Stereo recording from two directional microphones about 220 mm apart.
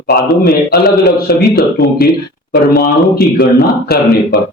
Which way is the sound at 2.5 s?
45° left (ahead or behind).